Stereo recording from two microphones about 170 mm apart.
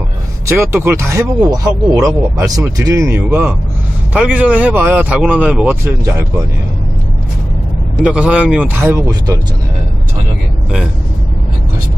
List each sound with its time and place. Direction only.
0.5 s speech: 15° right (ahead or behind)
8.0 s speech: 5° right (ahead or behind)